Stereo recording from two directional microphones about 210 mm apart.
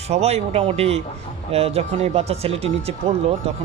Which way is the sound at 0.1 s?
30° right (ahead or behind).